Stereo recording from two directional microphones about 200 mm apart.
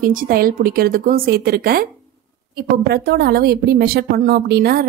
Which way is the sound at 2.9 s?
50° right (ahead or behind).